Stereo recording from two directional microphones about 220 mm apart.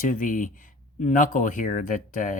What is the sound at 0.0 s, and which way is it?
Speech, 35° left (ahead or behind).